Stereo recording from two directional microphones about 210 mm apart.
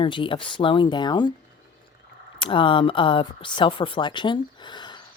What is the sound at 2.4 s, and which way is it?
Speech, 25° left (ahead or behind).